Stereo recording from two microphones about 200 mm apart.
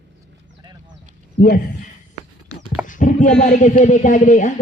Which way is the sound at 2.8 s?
40° left (ahead or behind).